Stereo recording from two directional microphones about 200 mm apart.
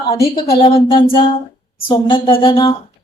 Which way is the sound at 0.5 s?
25° left (ahead or behind).